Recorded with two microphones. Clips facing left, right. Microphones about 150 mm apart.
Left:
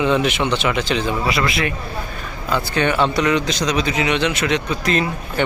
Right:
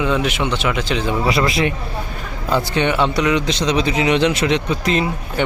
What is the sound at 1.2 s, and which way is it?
Speech, 30° right (ahead or behind).